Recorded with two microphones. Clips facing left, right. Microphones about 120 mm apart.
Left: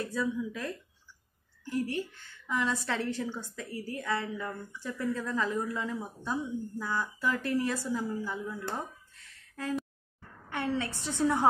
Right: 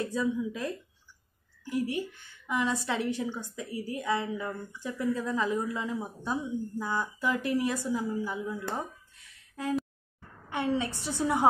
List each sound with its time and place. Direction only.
0.0 s a woman's voice: 20° right (ahead or behind)